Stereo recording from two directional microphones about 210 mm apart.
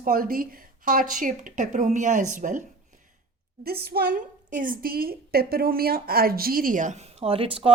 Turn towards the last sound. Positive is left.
turn(degrees=-25)  # may be behind; listen again after turning